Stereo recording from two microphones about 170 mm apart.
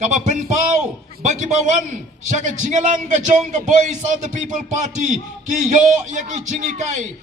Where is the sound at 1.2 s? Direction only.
45° right (ahead or behind).